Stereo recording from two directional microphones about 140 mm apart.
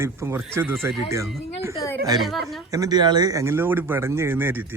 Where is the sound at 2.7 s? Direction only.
30° right (ahead or behind).